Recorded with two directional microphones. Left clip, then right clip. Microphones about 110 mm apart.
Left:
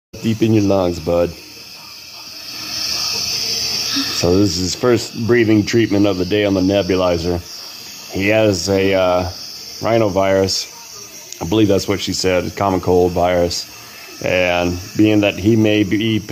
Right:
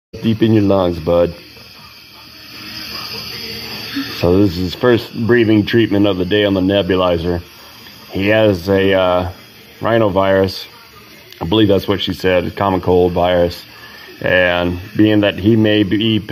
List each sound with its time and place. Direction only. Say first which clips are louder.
0.2 s speech: right 2 dB; 15° left (ahead or behind)
0.6 s speech: right 1 dB; 25° left (ahead or behind)
2.7 s a sound: left 6 dB; 35° left (ahead or behind)
4.3 s speech: right 3 dB; 30° left (ahead or behind)
5.7 s speech: right 1 dB; 30° left (ahead or behind)
6.7 s speech: right 1 dB; 20° left (ahead or behind)